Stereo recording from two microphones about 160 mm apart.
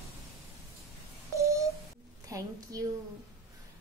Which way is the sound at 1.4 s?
20° right (ahead or behind).